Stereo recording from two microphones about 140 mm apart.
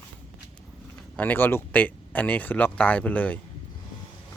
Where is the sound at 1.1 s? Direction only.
10° left (ahead or behind).